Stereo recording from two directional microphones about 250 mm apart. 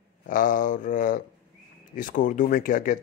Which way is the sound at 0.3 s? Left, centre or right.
Left.